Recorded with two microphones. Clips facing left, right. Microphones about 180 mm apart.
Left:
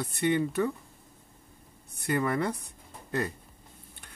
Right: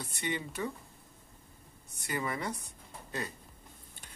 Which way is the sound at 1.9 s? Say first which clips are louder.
Left 8 dB; 60° left (ahead or behind).